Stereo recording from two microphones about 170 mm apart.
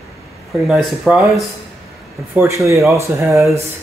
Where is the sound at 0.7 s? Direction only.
5° right (ahead or behind).